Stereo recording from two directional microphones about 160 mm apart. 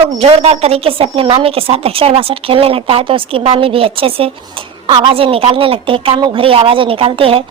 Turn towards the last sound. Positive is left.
turn(degrees=-35)  # may be behind; listen again after turning